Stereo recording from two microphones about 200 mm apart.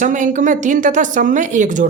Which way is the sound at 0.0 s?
40° right (ahead or behind).